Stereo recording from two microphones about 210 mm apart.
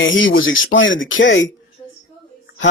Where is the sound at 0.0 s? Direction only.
65° left (ahead or behind).